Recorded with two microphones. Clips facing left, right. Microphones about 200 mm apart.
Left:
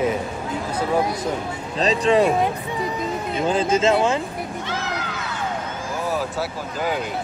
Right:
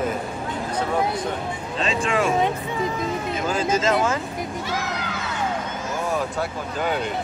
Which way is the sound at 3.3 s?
30° left (ahead or behind).